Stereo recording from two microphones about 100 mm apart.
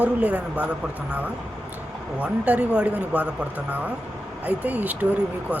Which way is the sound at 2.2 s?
15° right (ahead or behind).